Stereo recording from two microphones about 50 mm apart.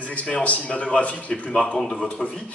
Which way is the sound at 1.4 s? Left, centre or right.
Centre.